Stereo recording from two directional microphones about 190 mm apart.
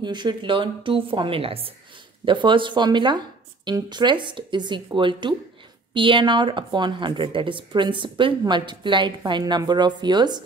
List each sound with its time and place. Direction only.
0.0 s a woman's voice: 25° right (ahead or behind)